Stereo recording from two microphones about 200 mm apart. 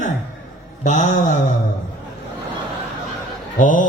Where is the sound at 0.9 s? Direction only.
40° left (ahead or behind).